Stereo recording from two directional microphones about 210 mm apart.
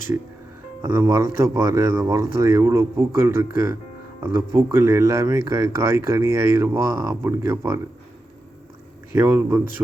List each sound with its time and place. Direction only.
0.8 s speech: 10° right (ahead or behind)
9.1 s speech: 10° right (ahead or behind)